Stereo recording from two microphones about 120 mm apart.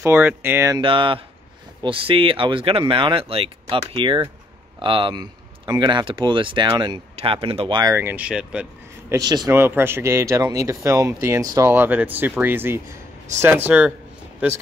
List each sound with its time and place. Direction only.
0.0 s speech: 20° right (ahead or behind)
0.7 s speech: 45° right (ahead or behind)
7.2 s speech: 50° right (ahead or behind)
7.9 s speech: 20° right (ahead or behind)
9.1 s speech: 35° right (ahead or behind)
9.5 s speech: 20° right (ahead or behind)
11.7 s speech: 15° right (ahead or behind)